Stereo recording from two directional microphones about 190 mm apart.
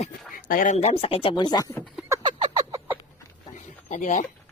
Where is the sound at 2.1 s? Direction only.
20° right (ahead or behind).